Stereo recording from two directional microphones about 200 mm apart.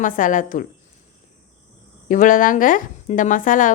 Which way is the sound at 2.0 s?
40° left (ahead or behind).